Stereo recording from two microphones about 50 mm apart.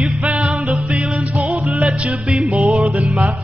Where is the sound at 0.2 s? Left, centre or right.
Right.